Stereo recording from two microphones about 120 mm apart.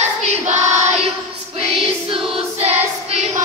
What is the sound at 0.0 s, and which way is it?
Choir, 65° right (ahead or behind).